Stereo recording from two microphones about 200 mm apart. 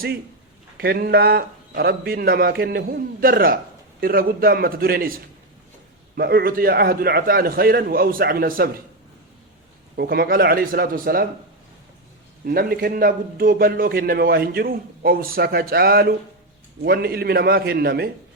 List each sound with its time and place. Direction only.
0.8 s a man's voice: 50° right (ahead or behind)
6.1 s a man's voice: 50° right (ahead or behind)
9.9 s a man's voice: 50° right (ahead or behind)
12.5 s a man's voice: 50° right (ahead or behind)